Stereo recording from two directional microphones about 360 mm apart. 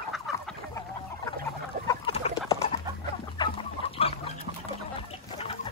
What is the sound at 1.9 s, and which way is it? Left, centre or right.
Chicken, centre.